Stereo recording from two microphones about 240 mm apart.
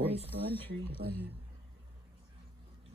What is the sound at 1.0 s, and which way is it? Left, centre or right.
Speech, right.